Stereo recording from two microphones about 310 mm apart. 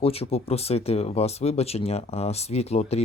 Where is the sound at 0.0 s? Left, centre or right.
Centre.